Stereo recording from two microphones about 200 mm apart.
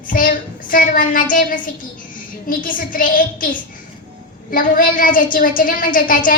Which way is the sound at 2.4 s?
45° left (ahead or behind).